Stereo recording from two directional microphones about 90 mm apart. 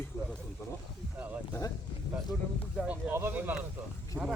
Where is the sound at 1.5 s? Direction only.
35° left (ahead or behind).